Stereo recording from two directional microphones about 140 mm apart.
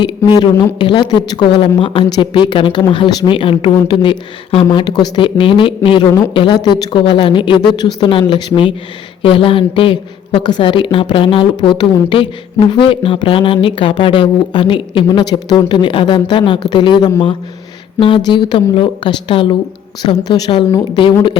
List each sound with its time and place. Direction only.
0.3 s a woman's voice: 35° left (ahead or behind)